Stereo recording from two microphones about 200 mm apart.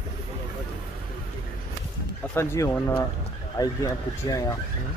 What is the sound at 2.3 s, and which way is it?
Speech, 15° left (ahead or behind).